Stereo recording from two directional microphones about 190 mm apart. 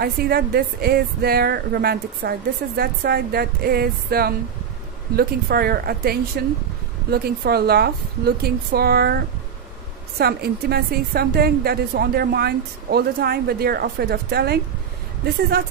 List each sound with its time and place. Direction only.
0.0 s a woman's voice: 55° right (ahead or behind)
10.1 s a woman's voice: 55° right (ahead or behind)